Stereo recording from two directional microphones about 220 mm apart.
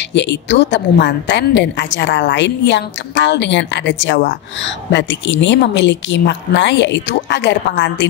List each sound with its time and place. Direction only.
0.1 s a woman's voice: 55° left (ahead or behind)